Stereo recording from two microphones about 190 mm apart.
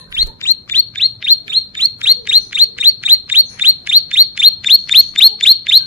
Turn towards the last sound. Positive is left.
turn(degrees=0)  # may be behind; listen again after turning